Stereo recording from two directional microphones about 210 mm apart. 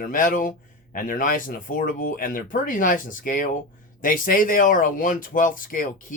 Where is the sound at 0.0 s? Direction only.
40° left (ahead or behind).